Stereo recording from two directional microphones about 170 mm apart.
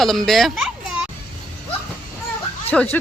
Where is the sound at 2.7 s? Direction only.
5° left (ahead or behind).